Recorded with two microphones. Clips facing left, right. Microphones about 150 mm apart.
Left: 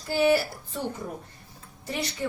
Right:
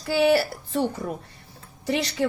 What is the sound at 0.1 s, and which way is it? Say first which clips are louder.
A woman's voice: right 3 dB; 90° right.